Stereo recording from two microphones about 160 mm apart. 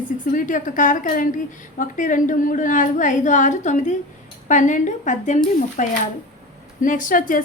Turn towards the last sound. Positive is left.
turn(degrees=60)  # may be behind; listen again after turning